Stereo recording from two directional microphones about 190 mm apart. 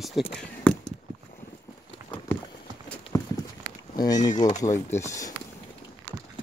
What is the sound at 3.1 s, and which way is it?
Clip-clop, 15° left (ahead or behind).